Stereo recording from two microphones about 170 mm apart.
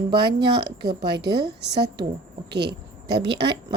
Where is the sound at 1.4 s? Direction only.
80° right.